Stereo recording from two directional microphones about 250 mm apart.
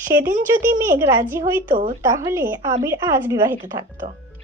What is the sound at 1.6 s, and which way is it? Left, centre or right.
Speech, right.